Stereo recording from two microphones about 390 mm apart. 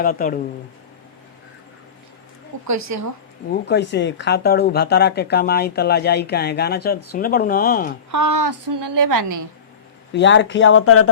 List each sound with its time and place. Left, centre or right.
0.0 s speech: left
2.6 s a woman's voice: right
3.5 s speech: left
8.1 s a woman's voice: right
10.1 s speech: left